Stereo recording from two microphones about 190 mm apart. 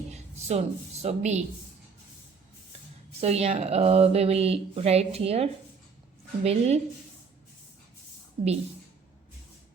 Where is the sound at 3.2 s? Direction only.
35° right (ahead or behind).